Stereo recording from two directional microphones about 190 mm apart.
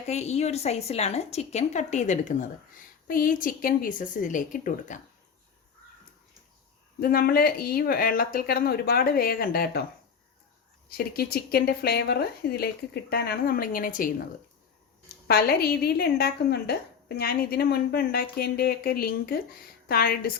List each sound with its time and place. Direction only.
0.1 s a woman's voice: 35° left (ahead or behind)
7.0 s speech: 50° left (ahead or behind)
10.8 s speech: 55° left (ahead or behind)
15.3 s a woman's voice: 55° left (ahead or behind)